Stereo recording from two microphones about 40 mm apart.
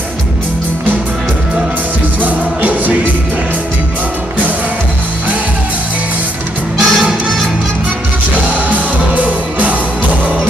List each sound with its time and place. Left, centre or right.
2.2 s music: right
6.8 s music: centre
8.5 s music: right